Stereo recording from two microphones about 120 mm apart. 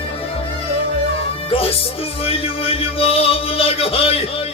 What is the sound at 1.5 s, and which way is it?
Music, 55° left (ahead or behind).